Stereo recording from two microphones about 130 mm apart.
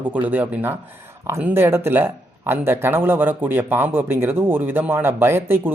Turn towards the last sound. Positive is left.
turn(degrees=-15)  # may be behind; listen again after turning